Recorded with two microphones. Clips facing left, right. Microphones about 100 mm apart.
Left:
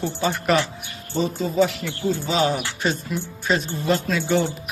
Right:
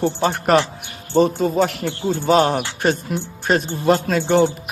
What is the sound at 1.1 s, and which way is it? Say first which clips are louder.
Speech: right 6 dB; 65° right (ahead or behind).